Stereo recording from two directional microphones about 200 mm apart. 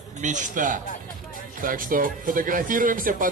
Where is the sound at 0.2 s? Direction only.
40° right (ahead or behind).